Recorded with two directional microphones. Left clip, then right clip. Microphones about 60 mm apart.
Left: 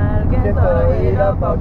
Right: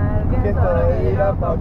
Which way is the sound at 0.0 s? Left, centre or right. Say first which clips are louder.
Left 2 dB; centre.